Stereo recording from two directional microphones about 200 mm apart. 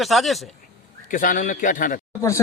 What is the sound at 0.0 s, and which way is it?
Speech, centre (ahead or behind).